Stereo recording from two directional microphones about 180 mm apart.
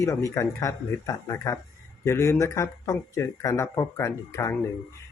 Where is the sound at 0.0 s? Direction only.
15° left (ahead or behind).